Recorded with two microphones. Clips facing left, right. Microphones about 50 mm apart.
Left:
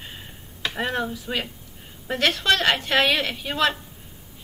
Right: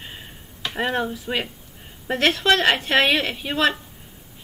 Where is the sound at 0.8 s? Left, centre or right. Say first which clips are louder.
Right 3 dB; centre.